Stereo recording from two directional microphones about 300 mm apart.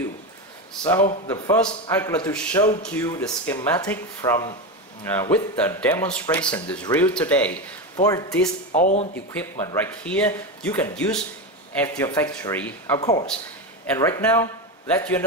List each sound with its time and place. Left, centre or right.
0.8 s a sound: centre
1.3 s a man's voice: centre
8.7 s speech: left
9.4 s a man's voice: centre